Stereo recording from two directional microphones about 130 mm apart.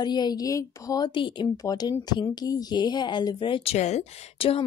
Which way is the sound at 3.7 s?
60° left (ahead or behind).